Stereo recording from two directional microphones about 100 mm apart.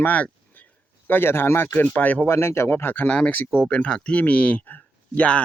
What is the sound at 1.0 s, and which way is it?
Speech, 20° left (ahead or behind).